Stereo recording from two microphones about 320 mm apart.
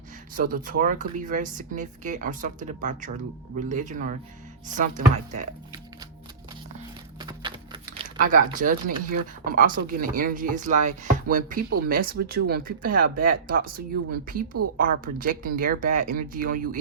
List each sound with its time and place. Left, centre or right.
0.3 s speech: right
7.2 s a sound: centre
7.9 s speech: right